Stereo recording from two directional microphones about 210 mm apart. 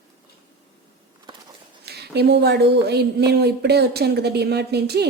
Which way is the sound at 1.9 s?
50° right (ahead or behind).